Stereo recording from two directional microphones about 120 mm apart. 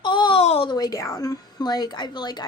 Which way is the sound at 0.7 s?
30° left (ahead or behind).